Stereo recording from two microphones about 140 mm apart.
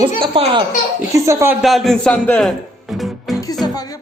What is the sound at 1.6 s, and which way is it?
Speech, centre (ahead or behind).